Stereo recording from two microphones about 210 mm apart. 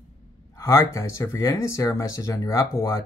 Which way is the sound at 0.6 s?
15° left (ahead or behind).